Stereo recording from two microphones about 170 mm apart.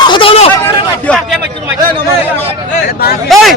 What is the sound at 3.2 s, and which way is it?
Speech, centre (ahead or behind).